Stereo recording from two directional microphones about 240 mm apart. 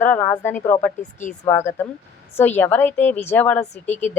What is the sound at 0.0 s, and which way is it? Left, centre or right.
Speech, centre.